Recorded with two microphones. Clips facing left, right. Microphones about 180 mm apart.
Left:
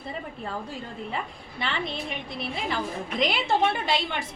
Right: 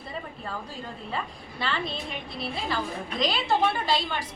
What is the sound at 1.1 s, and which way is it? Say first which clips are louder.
Speech: even; 20° left (ahead or behind).